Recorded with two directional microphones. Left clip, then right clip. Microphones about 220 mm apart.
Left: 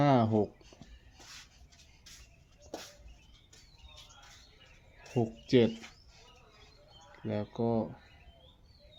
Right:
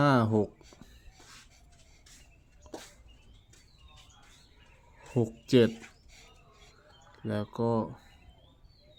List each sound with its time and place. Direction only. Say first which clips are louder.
0.0 s a sound: right 1 dB; 15° right (ahead or behind)
5.1 s speech: right 2 dB; 25° right (ahead or behind)
7.3 s speech: right 2 dB; 25° right (ahead or behind)